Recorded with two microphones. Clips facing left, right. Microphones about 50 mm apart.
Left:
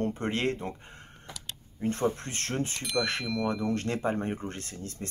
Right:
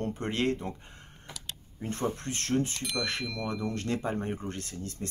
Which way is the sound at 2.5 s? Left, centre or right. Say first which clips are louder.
Right 4 dB; left.